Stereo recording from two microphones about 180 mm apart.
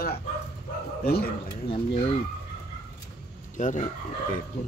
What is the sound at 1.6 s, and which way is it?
Speech, 30° left (ahead or behind).